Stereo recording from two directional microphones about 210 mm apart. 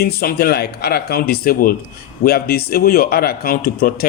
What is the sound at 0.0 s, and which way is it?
Speech, 45° left (ahead or behind).